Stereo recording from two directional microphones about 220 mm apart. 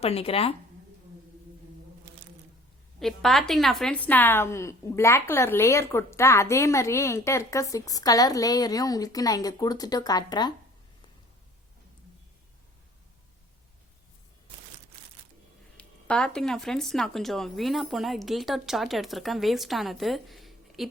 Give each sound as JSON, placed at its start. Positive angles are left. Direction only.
{"t": 0.0, "sound": "speech", "side_deg": 25}
{"t": 3.0, "sound": "a woman's voice", "side_deg": 0}
{"t": 15.8, "sound": "speech", "side_deg": 5}